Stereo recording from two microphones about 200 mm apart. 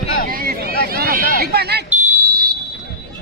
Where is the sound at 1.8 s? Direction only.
10° right (ahead or behind).